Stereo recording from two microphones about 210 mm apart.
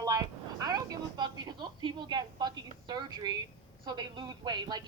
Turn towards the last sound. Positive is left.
turn(degrees=-20)  # may be behind; listen again after turning